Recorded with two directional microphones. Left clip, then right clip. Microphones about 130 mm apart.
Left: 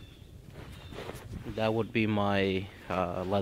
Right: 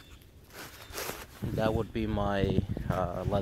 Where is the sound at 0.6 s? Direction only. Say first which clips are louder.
Right 4 dB; 50° right (ahead or behind).